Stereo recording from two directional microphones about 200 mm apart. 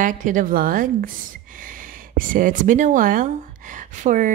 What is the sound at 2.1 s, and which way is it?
Speech, 45° right (ahead or behind).